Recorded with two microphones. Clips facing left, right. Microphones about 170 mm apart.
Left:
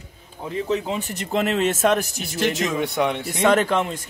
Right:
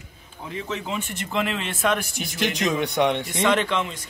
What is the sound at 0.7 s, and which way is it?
Speech, 35° left (ahead or behind).